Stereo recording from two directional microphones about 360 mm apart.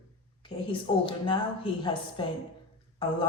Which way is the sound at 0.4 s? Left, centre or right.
Centre.